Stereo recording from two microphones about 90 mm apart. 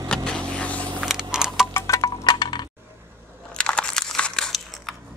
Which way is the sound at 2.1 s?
50° left (ahead or behind).